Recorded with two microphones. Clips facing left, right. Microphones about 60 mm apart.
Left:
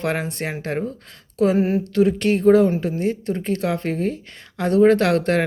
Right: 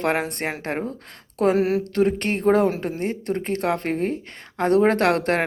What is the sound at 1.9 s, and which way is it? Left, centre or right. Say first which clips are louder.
A woman's voice: left 3 dB; right.